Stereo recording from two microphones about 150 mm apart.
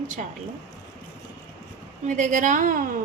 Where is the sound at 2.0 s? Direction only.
60° right (ahead or behind).